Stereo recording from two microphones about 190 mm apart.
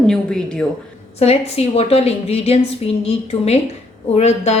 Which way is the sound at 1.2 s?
30° left (ahead or behind).